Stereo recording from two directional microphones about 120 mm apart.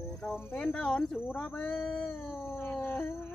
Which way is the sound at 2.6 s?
10° left (ahead or behind).